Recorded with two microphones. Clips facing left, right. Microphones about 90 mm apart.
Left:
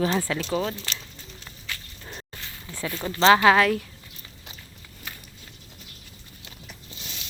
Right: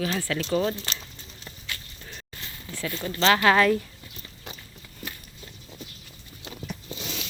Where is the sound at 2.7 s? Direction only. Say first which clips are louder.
Left 1 dB; 15° left (ahead or behind).